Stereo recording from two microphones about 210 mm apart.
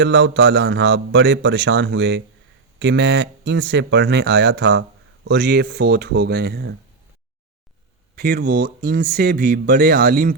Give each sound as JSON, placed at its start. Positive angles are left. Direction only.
{"t": 0.0, "sound": "a man's voice", "side_deg": -55}
{"t": 8.1, "sound": "speech", "side_deg": -45}